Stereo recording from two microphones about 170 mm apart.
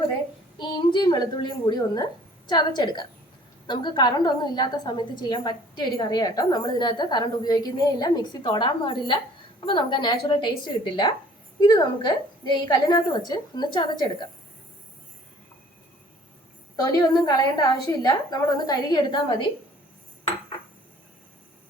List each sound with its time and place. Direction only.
0.6 s a woman's voice: 30° left (ahead or behind)
16.7 s a woman's voice: 20° left (ahead or behind)